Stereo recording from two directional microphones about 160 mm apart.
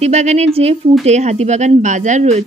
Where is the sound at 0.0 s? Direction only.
45° right (ahead or behind).